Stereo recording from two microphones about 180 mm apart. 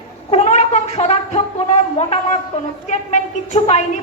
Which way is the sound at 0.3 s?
35° left (ahead or behind).